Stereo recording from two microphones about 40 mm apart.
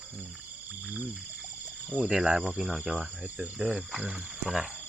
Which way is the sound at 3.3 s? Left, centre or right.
Right.